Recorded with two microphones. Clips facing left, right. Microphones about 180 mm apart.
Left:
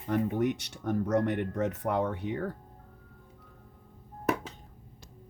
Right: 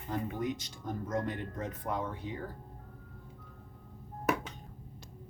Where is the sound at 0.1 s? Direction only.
75° left (ahead or behind).